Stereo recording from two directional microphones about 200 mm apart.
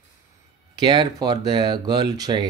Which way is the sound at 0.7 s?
20° right (ahead or behind).